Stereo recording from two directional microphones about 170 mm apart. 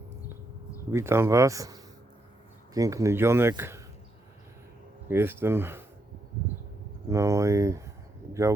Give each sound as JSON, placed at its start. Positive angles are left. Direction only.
{"t": 0.9, "sound": "speech", "side_deg": -15}
{"t": 3.6, "sound": "a sound", "side_deg": -15}
{"t": 5.0, "sound": "speech", "side_deg": -15}
{"t": 7.1, "sound": "speech", "side_deg": -15}
{"t": 8.3, "sound": "bird", "side_deg": -15}